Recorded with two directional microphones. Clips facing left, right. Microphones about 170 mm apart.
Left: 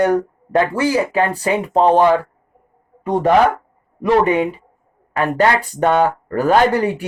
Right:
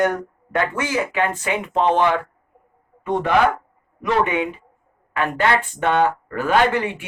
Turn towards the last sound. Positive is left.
turn(degrees=40)  # may be behind; listen again after turning